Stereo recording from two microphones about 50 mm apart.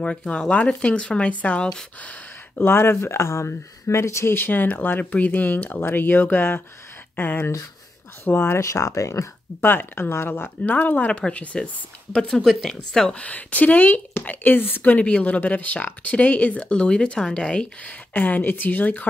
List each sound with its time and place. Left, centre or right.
0.0 s speech: left
2.0 s a sound: left
2.6 s speech: left
4.3 s speech: left
8.5 s speech: left
9.6 s speech: left
11.1 s speech: left; by 13.1 s centre
13.1 s speech: left
14.9 s speech: left
17.8 s speech: left